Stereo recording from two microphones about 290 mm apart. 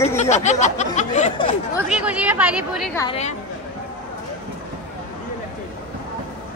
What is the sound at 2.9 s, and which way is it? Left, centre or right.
Speech, centre.